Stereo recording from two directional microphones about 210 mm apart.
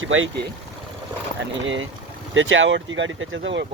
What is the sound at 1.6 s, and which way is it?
Speech, 65° right (ahead or behind).